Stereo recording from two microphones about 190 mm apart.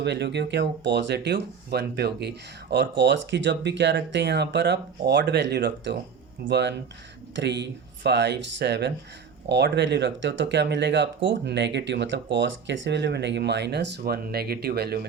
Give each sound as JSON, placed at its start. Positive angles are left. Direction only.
{"t": 0.0, "sound": "speech", "side_deg": -65}